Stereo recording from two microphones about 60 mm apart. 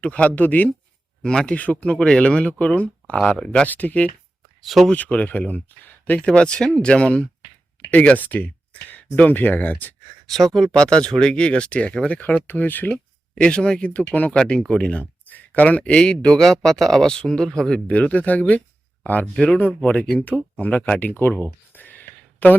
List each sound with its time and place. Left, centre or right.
0.0 s speech: left
1.2 s speech: centre
1.5 s speech: left
3.7 s speech: left
4.6 s speech: centre
4.9 s speech: left
6.1 s speech: centre
10.2 s speech: centre; by 13.0 s left
13.3 s speech: centre
13.9 s speech: left
17.8 s speech: left
19.2 s speech: centre
19.5 s speech: left
21.7 s a sound: left